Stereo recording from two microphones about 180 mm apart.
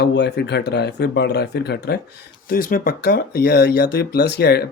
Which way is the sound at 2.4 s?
50° left (ahead or behind).